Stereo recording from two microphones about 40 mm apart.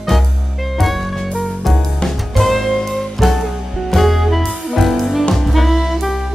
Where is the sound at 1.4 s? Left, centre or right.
Centre.